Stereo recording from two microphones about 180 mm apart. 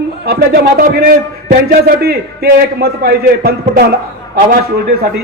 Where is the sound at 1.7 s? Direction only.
55° right (ahead or behind).